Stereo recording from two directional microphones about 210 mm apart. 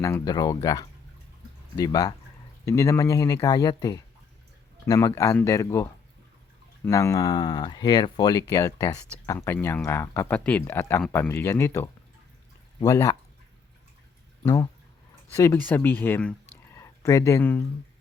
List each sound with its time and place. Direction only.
0.0 s speech: 15° left (ahead or behind)
14.4 s speech: 15° left (ahead or behind)